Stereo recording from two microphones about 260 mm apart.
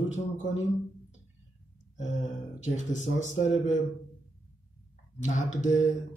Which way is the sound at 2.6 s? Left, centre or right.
Left.